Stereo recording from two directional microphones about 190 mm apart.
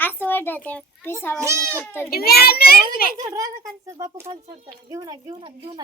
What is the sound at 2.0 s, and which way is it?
A child's voice, 55° left (ahead or behind).